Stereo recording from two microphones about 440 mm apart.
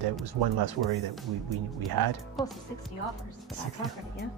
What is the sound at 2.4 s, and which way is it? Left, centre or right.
Speech, centre.